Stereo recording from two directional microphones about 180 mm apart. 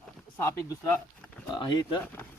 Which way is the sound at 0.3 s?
10° left (ahead or behind).